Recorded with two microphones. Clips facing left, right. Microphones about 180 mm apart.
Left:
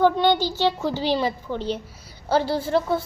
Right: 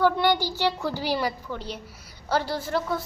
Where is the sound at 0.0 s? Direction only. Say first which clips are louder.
Left 3 dB; 20° left (ahead or behind).